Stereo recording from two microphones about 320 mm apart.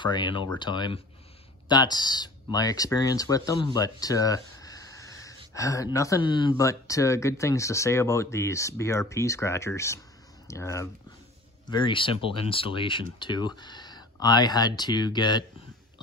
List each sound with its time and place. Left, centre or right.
0.0 s speech: centre